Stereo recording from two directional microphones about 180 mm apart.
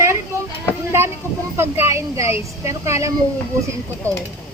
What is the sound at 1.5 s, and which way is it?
Speech, 15° right (ahead or behind).